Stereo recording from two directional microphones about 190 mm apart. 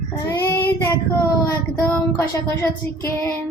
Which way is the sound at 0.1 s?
10° left (ahead or behind).